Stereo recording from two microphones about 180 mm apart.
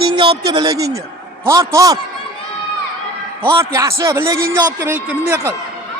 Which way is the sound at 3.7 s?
15° right (ahead or behind).